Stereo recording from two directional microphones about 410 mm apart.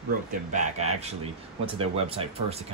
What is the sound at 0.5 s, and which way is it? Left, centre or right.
Speech, centre.